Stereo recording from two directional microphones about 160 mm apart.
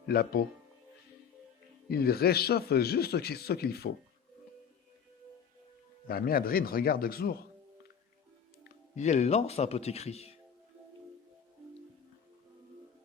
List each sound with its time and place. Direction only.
0.1 s a man's voice: 75° left (ahead or behind)
1.9 s a man's voice: 75° left (ahead or behind)
6.1 s a man's voice: 70° left (ahead or behind)
9.0 s speech: 45° left (ahead or behind)